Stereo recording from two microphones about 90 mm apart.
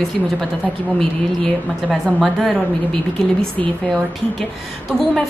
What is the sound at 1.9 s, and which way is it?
Speech, centre (ahead or behind).